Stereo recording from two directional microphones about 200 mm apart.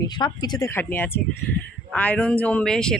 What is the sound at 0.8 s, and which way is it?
A man's voice, 10° left (ahead or behind).